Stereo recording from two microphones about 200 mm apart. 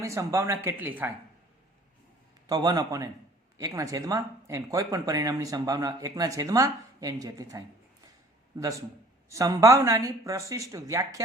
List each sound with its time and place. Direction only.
0.0 s speech: 15° right (ahead or behind)
2.5 s a man's voice: 20° right (ahead or behind)
9.3 s speech: 15° right (ahead or behind)